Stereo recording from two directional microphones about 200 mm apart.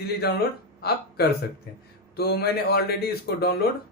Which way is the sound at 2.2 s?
50° left (ahead or behind).